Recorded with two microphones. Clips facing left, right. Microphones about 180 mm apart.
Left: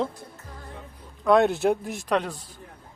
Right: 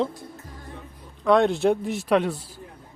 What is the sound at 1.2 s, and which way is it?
Speech, centre (ahead or behind).